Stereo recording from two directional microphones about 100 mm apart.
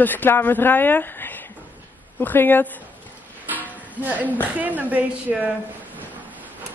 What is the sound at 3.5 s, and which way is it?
Music, 20° right (ahead or behind).